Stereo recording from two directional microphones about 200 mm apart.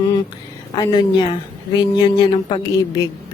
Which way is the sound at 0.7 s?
20° left (ahead or behind).